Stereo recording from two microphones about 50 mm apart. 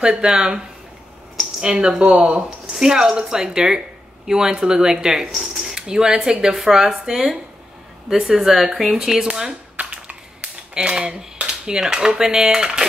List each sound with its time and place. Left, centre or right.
0.2 s speech: centre
1.6 s speech: centre
9.8 s finger snapping: right